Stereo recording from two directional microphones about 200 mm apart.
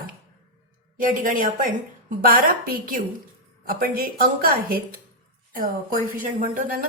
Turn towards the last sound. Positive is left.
turn(degrees=-45)  # may be behind; listen again after turning